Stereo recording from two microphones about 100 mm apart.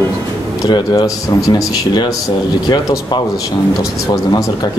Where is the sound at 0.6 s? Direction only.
40° left (ahead or behind).